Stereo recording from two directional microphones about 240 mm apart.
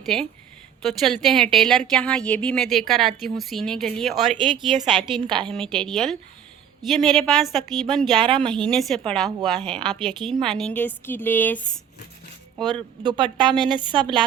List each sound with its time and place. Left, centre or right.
0.0 s a woman's voice: centre
5.2 s a woman's voice: centre
5.7 s a woman's voice: centre
8.1 s a woman's voice: centre
8.6 s a woman's voice: centre
9.4 s a woman's voice: centre
10.2 s a woman's voice: centre
12.5 s a woman's voice: centre